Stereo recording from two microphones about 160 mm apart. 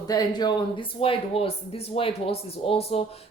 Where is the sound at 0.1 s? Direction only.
25° left (ahead or behind).